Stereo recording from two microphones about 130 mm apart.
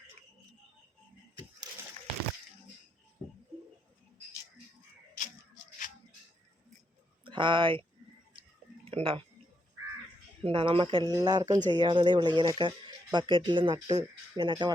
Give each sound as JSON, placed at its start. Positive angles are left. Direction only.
{"t": 7.3, "sound": "speech", "side_deg": -40}
{"t": 8.8, "sound": "a sound", "side_deg": -45}
{"t": 10.4, "sound": "speech", "side_deg": -45}
{"t": 11.0, "sound": "speech", "side_deg": -30}